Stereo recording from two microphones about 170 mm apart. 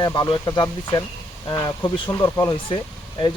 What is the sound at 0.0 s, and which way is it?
A man's voice, 25° left (ahead or behind).